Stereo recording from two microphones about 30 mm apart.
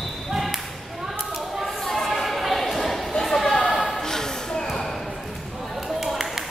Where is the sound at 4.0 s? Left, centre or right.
Centre.